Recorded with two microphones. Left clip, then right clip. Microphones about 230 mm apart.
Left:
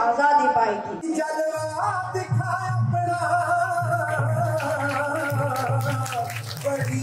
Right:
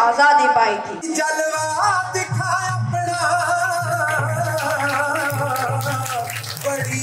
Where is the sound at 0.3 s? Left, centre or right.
Left.